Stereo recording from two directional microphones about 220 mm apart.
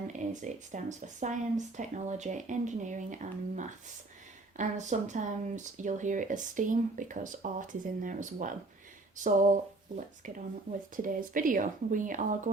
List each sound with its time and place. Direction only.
0.1 s speech: 35° right (ahead or behind)